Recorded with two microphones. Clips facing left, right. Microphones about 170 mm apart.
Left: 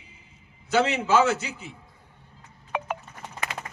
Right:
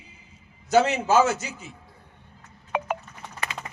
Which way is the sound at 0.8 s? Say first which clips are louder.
Even; 60° left (ahead or behind).